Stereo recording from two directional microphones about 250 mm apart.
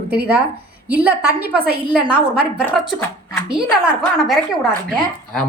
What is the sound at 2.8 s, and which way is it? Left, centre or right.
A woman's voice, centre.